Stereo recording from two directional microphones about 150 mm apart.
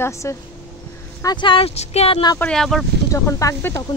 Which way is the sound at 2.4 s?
5° left (ahead or behind).